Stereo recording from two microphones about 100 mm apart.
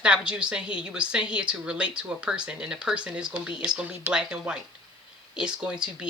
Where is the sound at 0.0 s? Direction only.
10° right (ahead or behind).